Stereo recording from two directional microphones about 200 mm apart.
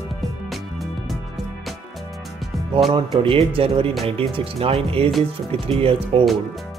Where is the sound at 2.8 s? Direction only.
25° right (ahead or behind).